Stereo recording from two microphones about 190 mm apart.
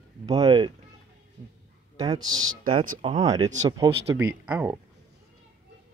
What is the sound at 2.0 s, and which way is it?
Speech, 20° right (ahead or behind).